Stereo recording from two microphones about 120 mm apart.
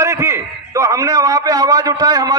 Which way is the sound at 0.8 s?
30° right (ahead or behind).